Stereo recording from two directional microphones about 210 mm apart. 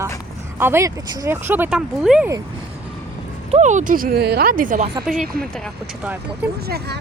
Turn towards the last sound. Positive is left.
turn(degrees=-50)  # may be behind; listen again after turning